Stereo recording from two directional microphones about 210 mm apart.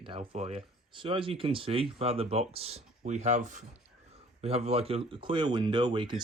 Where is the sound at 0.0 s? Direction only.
30° right (ahead or behind).